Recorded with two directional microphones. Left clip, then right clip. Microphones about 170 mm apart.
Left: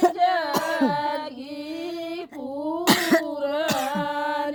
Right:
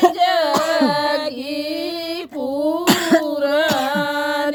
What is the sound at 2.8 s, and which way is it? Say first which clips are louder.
Cough: right 2 dB; 5° left (ahead or behind).